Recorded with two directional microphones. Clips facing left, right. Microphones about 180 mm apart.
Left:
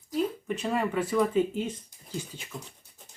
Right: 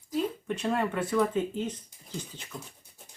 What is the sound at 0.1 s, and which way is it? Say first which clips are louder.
Speech: left 1 dB; 5° left (ahead or behind).